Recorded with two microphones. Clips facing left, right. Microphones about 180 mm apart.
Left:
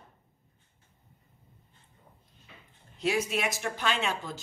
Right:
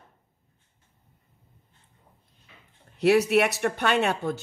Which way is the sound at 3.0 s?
70° right (ahead or behind).